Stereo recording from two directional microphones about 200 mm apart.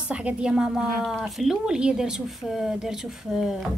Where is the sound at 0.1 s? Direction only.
5° right (ahead or behind).